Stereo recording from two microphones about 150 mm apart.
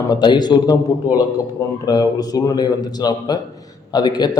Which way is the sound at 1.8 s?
25° left (ahead or behind).